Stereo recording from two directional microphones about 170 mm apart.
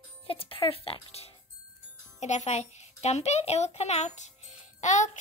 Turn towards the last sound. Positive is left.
turn(degrees=45)  # may be behind; listen again after turning